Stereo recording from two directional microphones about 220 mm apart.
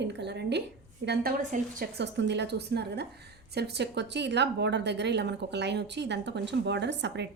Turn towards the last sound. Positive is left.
turn(degrees=-50)  # may be behind; listen again after turning